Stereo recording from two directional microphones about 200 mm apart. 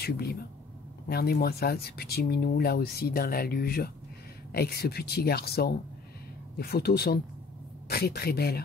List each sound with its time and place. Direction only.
0.0 s speech: 50° left (ahead or behind)